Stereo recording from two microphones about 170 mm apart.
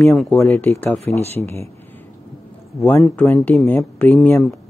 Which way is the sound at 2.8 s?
10° left (ahead or behind).